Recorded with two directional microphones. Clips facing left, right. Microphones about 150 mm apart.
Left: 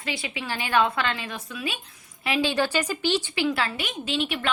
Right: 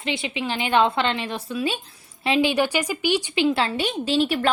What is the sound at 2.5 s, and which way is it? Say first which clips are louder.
A woman's voice: right 2 dB; 15° right (ahead or behind).